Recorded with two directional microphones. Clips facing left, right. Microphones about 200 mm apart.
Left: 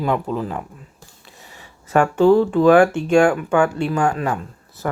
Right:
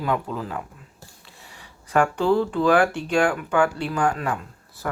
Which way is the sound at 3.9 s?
25° left (ahead or behind).